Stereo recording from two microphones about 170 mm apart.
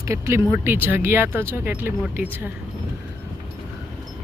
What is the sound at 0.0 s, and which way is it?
Speech, 15° right (ahead or behind).